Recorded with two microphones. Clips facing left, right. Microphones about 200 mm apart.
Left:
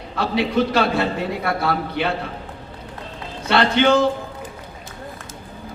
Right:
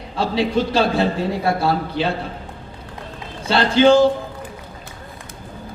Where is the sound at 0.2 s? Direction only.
30° right (ahead or behind).